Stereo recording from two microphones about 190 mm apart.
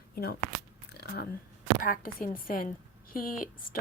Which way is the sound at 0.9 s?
55° left (ahead or behind).